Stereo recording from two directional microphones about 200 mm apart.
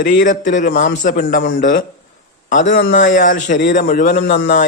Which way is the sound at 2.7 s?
65° left (ahead or behind).